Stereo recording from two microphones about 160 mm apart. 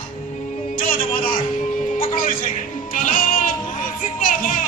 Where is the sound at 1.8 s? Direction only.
55° left (ahead or behind).